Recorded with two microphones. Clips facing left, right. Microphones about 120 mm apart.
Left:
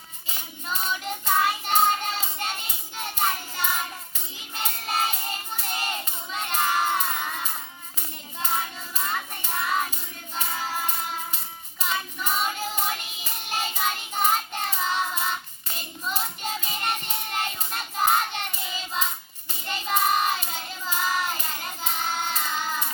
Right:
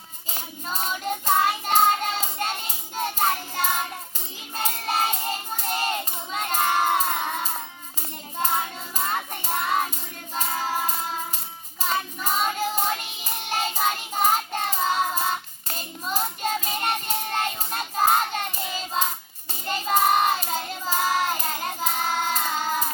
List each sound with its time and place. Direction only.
0.3 s child singing: 40° right (ahead or behind)
4.5 s music: 40° right (ahead or behind)
5.5 s child singing: 35° right (ahead or behind)
7.0 s a sound: 30° right (ahead or behind)
8.4 s child singing: 35° right (ahead or behind)